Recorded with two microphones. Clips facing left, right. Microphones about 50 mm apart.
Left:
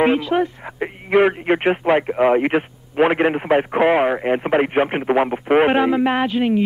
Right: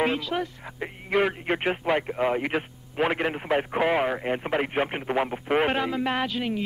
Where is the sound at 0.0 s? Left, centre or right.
Left.